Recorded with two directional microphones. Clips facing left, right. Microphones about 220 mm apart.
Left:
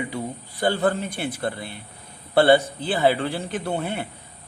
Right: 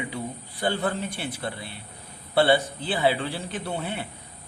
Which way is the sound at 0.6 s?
50° left (ahead or behind).